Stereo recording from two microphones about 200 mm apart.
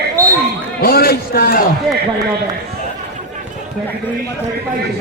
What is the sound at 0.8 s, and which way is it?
Speech, 50° left (ahead or behind).